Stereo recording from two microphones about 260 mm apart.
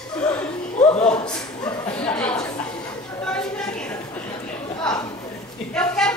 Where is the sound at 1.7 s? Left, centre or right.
Centre.